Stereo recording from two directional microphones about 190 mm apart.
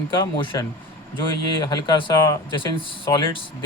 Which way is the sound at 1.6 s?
20° left (ahead or behind).